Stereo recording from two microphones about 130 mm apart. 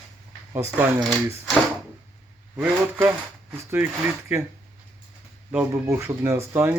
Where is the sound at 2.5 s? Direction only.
15° right (ahead or behind).